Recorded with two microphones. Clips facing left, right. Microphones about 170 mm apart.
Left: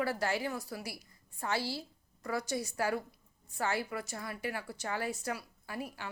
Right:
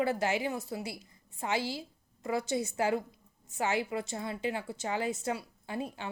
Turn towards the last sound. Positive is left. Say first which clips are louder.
# right 4 dB
turn(degrees=-25)  # may be behind; listen again after turning